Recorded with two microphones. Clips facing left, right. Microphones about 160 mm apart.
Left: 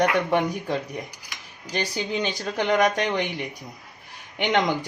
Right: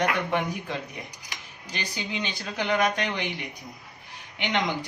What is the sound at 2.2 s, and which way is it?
Speech, 45° left (ahead or behind).